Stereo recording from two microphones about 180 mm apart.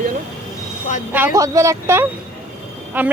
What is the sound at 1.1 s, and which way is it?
Speech, 15° right (ahead or behind).